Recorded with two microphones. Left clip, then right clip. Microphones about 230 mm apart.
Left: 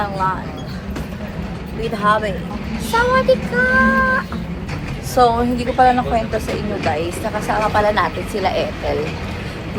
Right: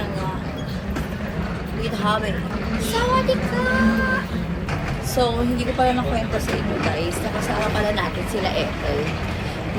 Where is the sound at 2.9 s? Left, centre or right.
Centre.